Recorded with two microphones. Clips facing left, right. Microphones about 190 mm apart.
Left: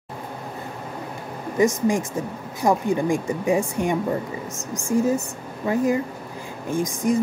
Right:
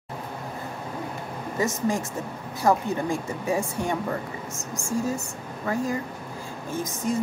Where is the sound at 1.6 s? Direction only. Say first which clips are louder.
Left 6 dB; 15° left (ahead or behind).